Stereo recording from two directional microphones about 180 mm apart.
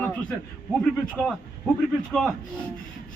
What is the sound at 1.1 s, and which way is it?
Speech, centre (ahead or behind).